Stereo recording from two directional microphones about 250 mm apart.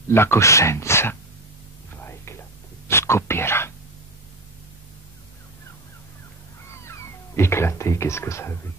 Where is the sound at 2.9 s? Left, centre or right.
Centre.